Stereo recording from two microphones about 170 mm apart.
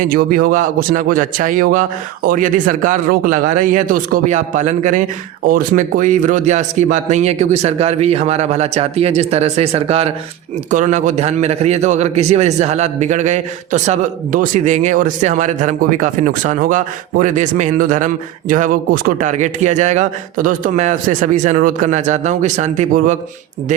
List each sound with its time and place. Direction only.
0.0 s a man's voice: 60° right (ahead or behind); by 10.1 s 35° right (ahead or behind)
10.7 s a man's voice: 45° right (ahead or behind)